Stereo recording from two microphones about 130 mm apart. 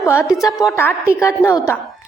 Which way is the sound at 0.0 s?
20° left (ahead or behind).